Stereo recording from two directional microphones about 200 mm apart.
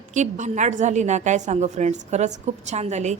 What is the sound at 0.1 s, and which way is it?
A woman's voice, 35° right (ahead or behind).